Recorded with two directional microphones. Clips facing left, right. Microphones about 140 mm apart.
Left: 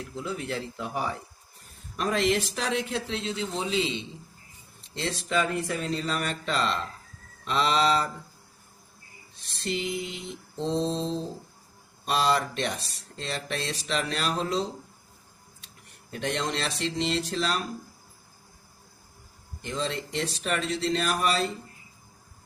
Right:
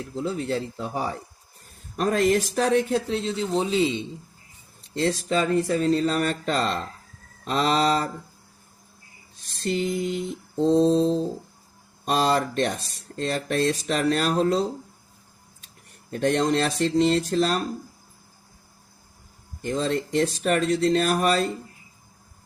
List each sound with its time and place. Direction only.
0.1 s speech: 35° right (ahead or behind)
4.9 s speech: 45° right (ahead or behind)
9.4 s mantra: 45° right (ahead or behind)
12.0 s speech: 45° right (ahead or behind)
16.1 s speech: 45° right (ahead or behind)
19.6 s speech: 45° right (ahead or behind)